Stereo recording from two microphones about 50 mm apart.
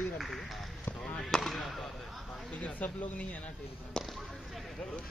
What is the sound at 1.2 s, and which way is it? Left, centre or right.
Speech, centre.